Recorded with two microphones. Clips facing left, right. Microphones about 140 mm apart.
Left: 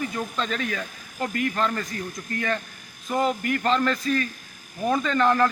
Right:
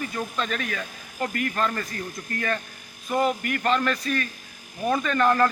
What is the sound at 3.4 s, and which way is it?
Speech, 25° left (ahead or behind).